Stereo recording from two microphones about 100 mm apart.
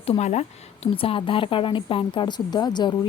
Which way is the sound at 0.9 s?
65° left (ahead or behind).